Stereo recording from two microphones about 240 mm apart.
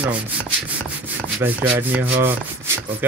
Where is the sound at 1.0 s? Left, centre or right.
Centre.